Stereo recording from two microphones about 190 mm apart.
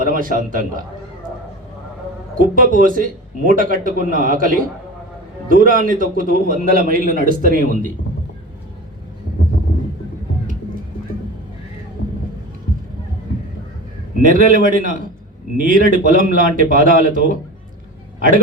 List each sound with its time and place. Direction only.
0.0 s a man's voice: 45° right (ahead or behind)
2.4 s a man's voice: 45° right (ahead or behind)
14.2 s a man's voice: 45° right (ahead or behind)